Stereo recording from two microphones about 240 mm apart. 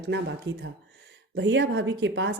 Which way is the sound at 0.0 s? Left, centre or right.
Right.